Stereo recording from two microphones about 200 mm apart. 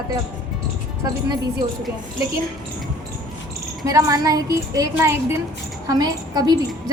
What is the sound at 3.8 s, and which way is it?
A woman's voice, 15° right (ahead or behind).